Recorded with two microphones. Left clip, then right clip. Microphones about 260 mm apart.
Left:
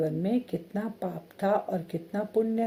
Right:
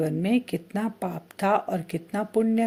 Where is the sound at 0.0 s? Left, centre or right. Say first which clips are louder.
Right 3 dB; right.